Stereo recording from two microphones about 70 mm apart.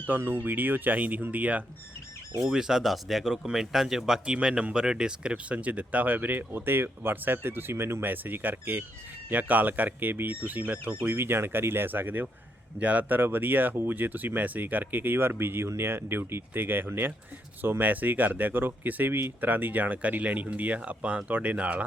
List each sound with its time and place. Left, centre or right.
0.1 s speech: right
2.4 s speech: centre